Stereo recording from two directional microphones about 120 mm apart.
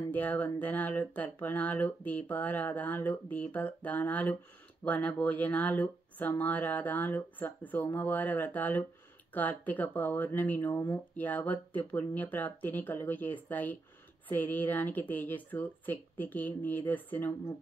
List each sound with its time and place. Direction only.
0.1 s speech: 15° left (ahead or behind)